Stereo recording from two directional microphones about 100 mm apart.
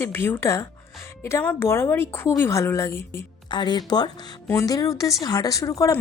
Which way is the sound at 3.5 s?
45° left (ahead or behind).